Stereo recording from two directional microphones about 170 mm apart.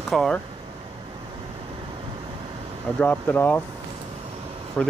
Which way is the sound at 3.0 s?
10° left (ahead or behind).